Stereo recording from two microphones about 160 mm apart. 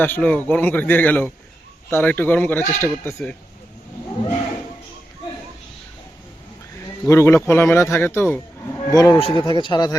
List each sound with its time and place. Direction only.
0.0 s speech: 10° left (ahead or behind)
7.0 s speech: 15° left (ahead or behind)
9.1 s speech: 35° left (ahead or behind)